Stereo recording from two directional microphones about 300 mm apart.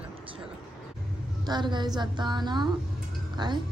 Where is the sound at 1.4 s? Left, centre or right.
Centre.